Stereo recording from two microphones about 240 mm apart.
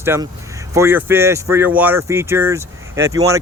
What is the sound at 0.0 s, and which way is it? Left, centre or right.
Speech, centre.